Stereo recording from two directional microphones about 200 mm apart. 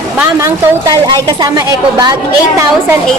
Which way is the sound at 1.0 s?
20° right (ahead or behind).